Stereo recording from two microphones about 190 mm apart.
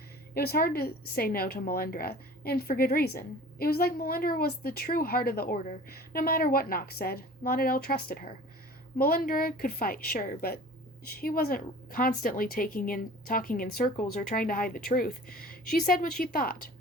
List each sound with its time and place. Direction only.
0.3 s a woman's voice: 55° left (ahead or behind)